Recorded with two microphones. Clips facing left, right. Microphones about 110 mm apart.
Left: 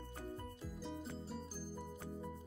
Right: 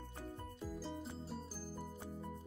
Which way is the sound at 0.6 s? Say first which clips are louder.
Right 2 dB; centre (ahead or behind).